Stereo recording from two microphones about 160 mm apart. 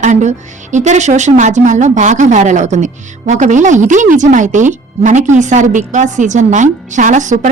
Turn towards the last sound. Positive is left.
turn(degrees=-50)  # may be behind; listen again after turning